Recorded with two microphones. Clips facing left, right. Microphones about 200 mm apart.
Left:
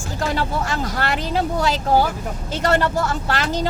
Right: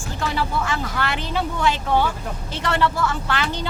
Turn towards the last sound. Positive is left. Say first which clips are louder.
# left 3 dB
turn(degrees=40)  # may be behind; listen again after turning